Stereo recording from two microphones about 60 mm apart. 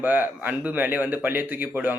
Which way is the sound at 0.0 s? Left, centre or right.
Right.